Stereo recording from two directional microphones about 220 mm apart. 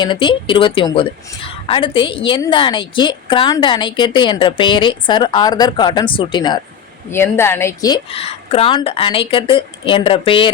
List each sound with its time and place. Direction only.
0.0 s a woman's voice: 20° left (ahead or behind)